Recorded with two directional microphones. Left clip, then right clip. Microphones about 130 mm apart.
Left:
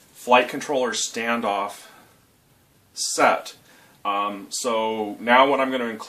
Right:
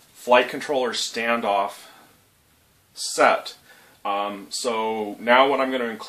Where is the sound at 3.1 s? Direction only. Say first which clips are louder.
Right 1 dB; 15° right (ahead or behind).